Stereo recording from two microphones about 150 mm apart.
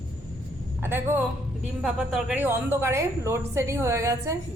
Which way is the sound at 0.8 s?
15° right (ahead or behind).